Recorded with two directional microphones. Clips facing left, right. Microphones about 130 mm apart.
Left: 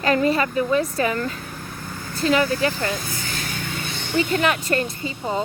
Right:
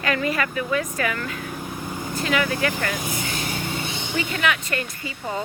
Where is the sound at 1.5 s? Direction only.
15° right (ahead or behind).